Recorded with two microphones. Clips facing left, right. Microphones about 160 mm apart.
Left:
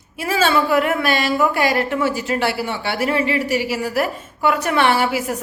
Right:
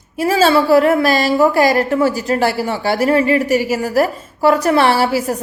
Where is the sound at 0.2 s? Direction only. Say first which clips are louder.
Right 5 dB; 35° right (ahead or behind).